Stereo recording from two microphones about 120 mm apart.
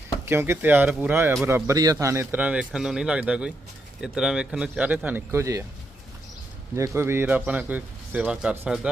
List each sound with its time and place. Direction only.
0.3 s a man's voice: 20° right (ahead or behind)
6.7 s a man's voice: 25° right (ahead or behind)